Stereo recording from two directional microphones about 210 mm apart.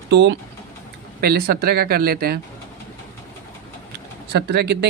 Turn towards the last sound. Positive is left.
turn(degrees=-55)  # may be behind; listen again after turning